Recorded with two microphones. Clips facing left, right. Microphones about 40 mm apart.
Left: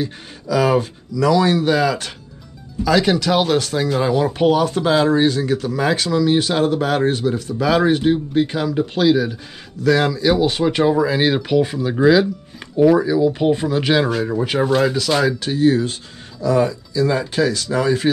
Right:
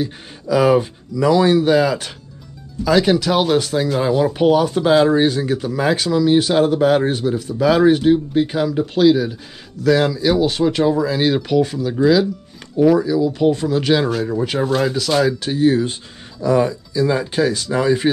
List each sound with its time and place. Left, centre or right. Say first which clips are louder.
0.0 s speech: right 1 dB; centre
1.5 s speech: right 2 dB; centre
16.9 s speech: right 1 dB; centre